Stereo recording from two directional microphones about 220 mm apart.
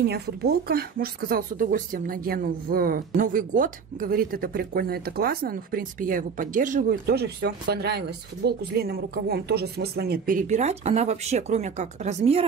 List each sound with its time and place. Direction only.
0.0 s speech: 45° right (ahead or behind); by 12.4 s 30° right (ahead or behind)